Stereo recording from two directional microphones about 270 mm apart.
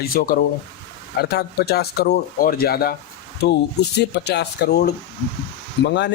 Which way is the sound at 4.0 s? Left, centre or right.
Left.